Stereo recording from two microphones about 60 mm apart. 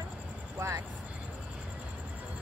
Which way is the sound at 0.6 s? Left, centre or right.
Right.